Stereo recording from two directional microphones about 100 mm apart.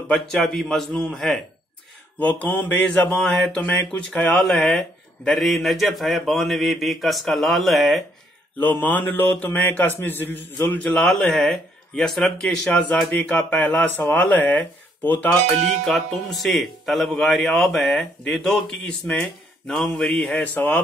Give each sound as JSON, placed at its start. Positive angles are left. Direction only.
{"t": 0.1, "sound": "a man's voice", "side_deg": 5}
{"t": 2.1, "sound": "a man's voice", "side_deg": 15}
{"t": 8.5, "sound": "speech", "side_deg": 20}
{"t": 15.8, "sound": "a man's voice", "side_deg": 5}
{"t": 20.5, "sound": "speech", "side_deg": 15}